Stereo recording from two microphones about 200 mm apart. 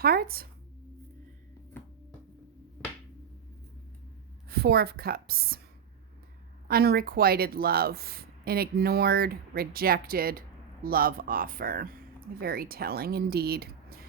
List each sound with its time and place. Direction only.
0.0 s speech: 50° right (ahead or behind)
4.4 s speech: 50° right (ahead or behind)
6.7 s speech: 50° right (ahead or behind)